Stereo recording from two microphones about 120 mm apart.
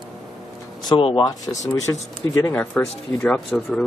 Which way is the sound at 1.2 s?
30° left (ahead or behind).